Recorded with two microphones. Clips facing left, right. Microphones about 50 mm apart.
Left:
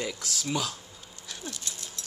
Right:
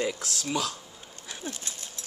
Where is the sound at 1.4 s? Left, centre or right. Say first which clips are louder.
Right 2 dB; right.